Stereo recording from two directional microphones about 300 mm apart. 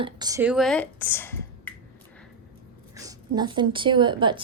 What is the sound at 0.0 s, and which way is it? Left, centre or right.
Speech, centre.